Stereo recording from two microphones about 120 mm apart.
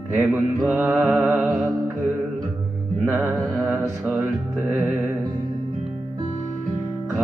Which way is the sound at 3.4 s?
5° left (ahead or behind).